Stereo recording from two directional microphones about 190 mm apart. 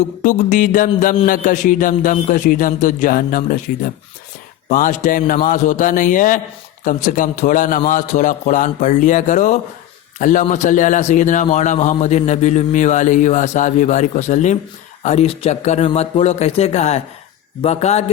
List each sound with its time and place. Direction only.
0.2 s a man's voice: 45° left (ahead or behind)
4.7 s a man's voice: 45° left (ahead or behind)